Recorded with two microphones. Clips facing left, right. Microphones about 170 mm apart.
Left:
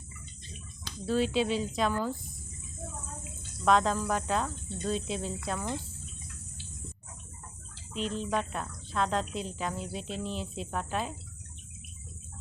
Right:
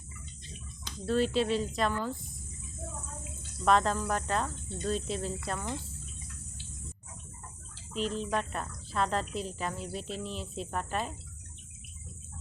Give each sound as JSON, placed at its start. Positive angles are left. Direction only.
{"t": 1.0, "sound": "a woman's voice", "side_deg": 0}
{"t": 3.6, "sound": "a woman's voice", "side_deg": 0}
{"t": 7.9, "sound": "a woman's voice", "side_deg": 0}